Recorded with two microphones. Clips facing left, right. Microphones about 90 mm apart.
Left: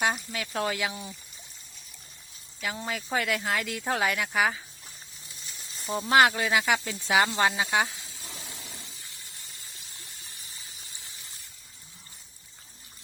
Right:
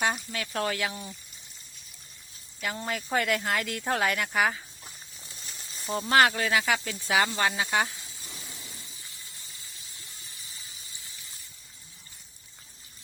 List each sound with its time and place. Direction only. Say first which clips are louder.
0.0 s speech: left 1 dB; 10° left (ahead or behind)
2.6 s speech: right 1 dB; centre (ahead or behind)
5.7 s speech: left 1 dB; centre (ahead or behind); by 7.7 s 20° left (ahead or behind)
8.4 s a sound: left 2 dB; 90° left
8.7 s water: left 2 dB; 75° left (ahead or behind); by 10.2 s 60° left (ahead or behind)
10.7 s gush: left 1 dB; 60° left (ahead or behind)